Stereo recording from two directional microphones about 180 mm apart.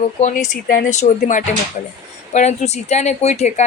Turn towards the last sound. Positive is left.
turn(degrees=40)  # may be behind; listen again after turning